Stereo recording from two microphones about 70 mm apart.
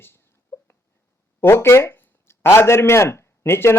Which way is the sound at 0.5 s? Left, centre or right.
Left.